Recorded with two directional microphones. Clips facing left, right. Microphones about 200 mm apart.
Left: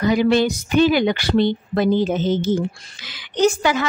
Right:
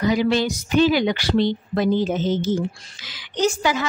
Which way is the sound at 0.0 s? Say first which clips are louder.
Left 3 dB; 55° left (ahead or behind).